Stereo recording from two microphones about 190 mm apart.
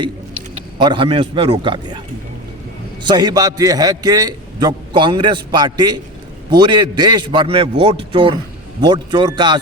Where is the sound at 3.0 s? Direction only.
20° right (ahead or behind).